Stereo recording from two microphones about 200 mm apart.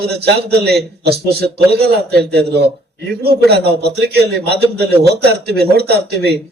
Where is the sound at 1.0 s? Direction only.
55° right (ahead or behind).